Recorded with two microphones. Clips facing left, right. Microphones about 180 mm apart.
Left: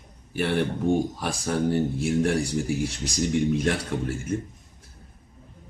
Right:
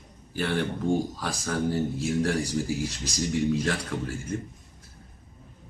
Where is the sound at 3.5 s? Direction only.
20° left (ahead or behind).